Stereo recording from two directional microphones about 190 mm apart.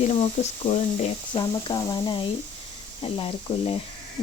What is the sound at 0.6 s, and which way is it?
Speech, 30° left (ahead or behind).